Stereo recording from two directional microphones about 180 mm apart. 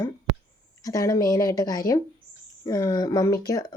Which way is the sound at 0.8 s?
20° left (ahead or behind).